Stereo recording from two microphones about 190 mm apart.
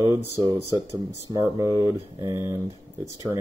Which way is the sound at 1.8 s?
15° right (ahead or behind).